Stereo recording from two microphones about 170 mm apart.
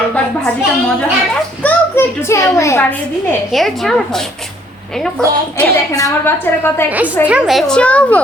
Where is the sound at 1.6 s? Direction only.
10° left (ahead or behind).